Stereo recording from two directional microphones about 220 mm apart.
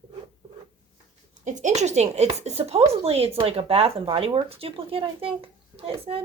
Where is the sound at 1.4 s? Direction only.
30° right (ahead or behind).